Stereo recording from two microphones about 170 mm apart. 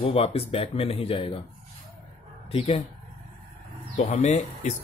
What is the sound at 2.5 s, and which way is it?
Speech, 40° left (ahead or behind).